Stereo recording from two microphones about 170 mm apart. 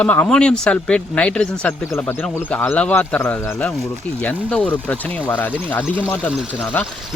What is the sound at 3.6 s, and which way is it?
Speech, centre (ahead or behind).